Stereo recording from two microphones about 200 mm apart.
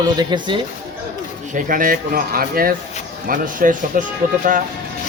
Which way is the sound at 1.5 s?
45° right (ahead or behind).